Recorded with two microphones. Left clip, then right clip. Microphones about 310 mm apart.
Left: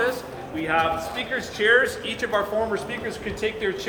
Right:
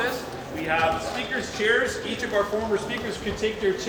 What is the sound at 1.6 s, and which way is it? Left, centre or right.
Speech, centre.